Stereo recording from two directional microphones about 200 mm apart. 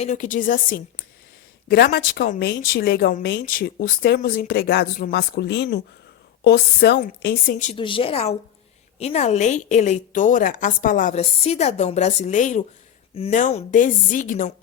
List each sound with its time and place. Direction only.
0.0 s a woman's voice: 40° left (ahead or behind); by 7.5 s 55° left (ahead or behind)
7.6 s a woman's voice: 30° left (ahead or behind)